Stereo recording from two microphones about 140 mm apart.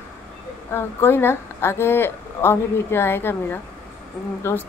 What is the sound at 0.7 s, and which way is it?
A woman's voice, 15° left (ahead or behind).